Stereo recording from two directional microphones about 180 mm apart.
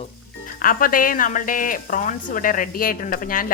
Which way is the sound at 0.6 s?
50° left (ahead or behind).